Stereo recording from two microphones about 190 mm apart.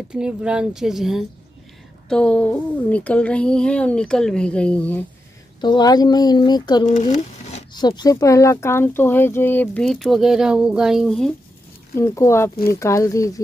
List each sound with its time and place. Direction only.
0.1 s speech: 5° right (ahead or behind)
5.6 s speech: 20° left (ahead or behind)
6.9 s a sound: 40° left (ahead or behind)
7.7 s speech: 20° left (ahead or behind); by 11.3 s centre (ahead or behind)
12.0 s speech: 15° left (ahead or behind)